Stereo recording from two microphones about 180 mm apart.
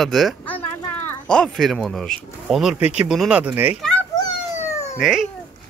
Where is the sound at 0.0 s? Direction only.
Centre (ahead or behind).